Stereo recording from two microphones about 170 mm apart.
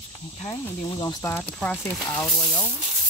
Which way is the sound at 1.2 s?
10° left (ahead or behind).